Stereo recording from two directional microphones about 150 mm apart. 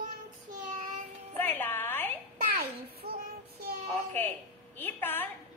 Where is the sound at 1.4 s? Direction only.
15° left (ahead or behind).